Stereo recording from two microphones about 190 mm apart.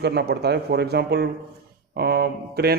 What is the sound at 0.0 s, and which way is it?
A man's voice, 60° right (ahead or behind).